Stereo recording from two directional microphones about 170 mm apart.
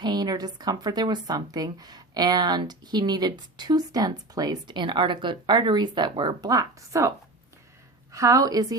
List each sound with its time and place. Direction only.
0.0 s a woman's voice: 25° right (ahead or behind)
8.1 s a woman's voice: 20° right (ahead or behind)